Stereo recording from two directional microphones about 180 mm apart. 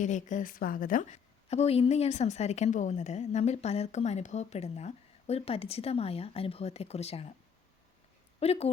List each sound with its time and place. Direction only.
0.0 s a woman's voice: 45° left (ahead or behind)
8.4 s a woman's voice: 35° left (ahead or behind)